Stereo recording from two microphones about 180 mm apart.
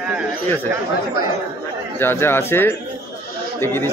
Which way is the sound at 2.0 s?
15° left (ahead or behind).